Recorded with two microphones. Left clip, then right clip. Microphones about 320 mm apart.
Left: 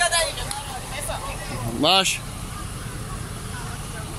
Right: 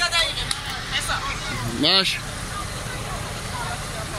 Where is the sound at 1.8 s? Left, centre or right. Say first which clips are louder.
Even; centre.